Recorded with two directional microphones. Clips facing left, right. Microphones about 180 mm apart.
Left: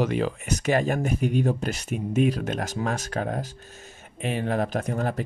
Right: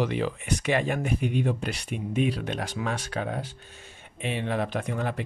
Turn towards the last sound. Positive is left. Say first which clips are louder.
# left 3 dB
turn(degrees=40)  # may be behind; listen again after turning